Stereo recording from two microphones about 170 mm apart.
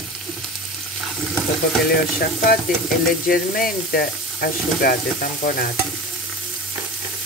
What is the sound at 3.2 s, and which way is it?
Speech, 60° left (ahead or behind).